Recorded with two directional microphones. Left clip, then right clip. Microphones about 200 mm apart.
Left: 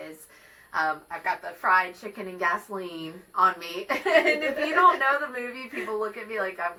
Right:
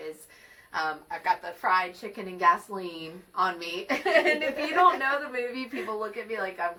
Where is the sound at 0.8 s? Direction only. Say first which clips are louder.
Left 3 dB; 15° right (ahead or behind).